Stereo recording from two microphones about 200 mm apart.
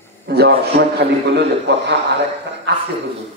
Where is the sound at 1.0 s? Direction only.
55° right (ahead or behind).